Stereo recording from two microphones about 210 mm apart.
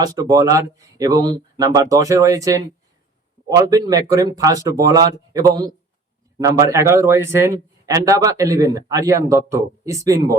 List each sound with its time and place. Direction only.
0.0 s a man's voice: 15° right (ahead or behind)
3.5 s a man's voice: 15° right (ahead or behind)